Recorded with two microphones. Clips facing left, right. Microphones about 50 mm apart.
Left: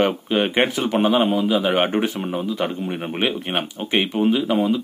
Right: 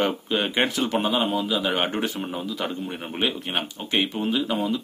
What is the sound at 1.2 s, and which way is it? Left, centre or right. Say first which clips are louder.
A man's voice: left 5 dB; left.